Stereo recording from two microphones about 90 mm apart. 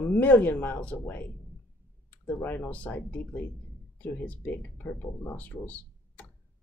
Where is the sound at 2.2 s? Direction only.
20° left (ahead or behind).